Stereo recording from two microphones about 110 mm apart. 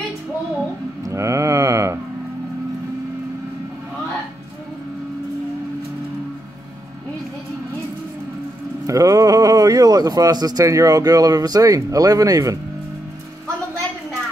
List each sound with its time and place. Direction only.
1.0 s mantra: 30° right (ahead or behind)
8.8 s speech: 30° right (ahead or behind)